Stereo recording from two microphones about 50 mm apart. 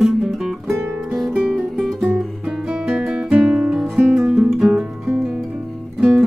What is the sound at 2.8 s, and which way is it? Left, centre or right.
Guitar, centre.